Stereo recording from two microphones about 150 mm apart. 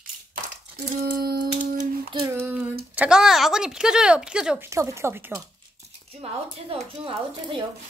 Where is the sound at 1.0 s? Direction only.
85° right.